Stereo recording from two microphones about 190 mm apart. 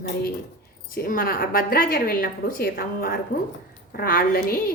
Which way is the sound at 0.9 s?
50° left (ahead or behind).